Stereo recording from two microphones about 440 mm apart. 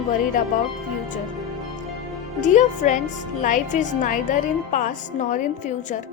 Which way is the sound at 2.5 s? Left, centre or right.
Centre.